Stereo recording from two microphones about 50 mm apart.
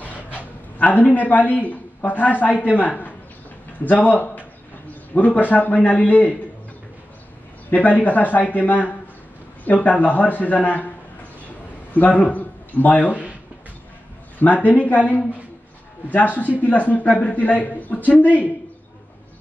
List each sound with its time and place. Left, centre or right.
0.0 s dog: left
0.7 s a man's voice: left
7.7 s a man's voice: left
11.9 s speech: left
14.7 s a man's voice: left